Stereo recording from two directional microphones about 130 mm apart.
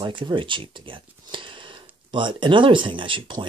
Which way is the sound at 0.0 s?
40° right (ahead or behind).